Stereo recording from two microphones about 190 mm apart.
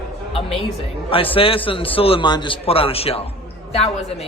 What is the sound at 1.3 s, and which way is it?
A man's voice, 30° left (ahead or behind).